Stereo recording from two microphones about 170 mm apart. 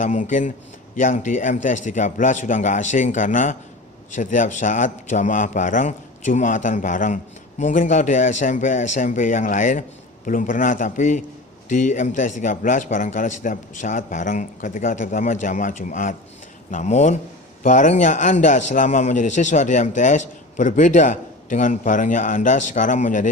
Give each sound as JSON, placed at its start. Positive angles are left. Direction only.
{"t": 0.0, "sound": "a man's voice", "side_deg": 50}